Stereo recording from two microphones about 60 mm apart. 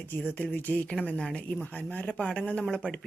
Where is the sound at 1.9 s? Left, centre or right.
Left.